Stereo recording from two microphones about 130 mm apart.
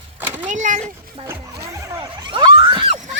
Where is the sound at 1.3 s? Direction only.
25° right (ahead or behind).